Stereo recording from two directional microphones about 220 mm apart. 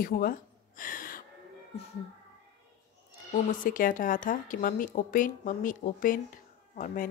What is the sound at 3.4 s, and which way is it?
A woman's voice, 40° left (ahead or behind).